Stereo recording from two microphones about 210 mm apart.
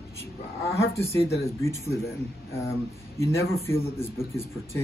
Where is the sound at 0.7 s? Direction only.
15° left (ahead or behind).